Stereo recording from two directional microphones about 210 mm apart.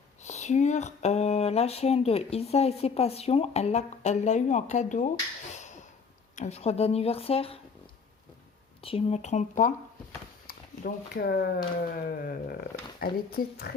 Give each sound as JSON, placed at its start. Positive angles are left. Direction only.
{"t": 0.2, "sound": "speech", "side_deg": 35}
{"t": 8.8, "sound": "speech", "side_deg": 25}